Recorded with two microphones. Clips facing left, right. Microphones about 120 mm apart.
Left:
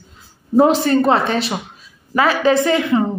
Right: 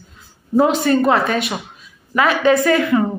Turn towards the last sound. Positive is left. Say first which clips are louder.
# right 1 dB
turn(degrees=25)  # may be behind; listen again after turning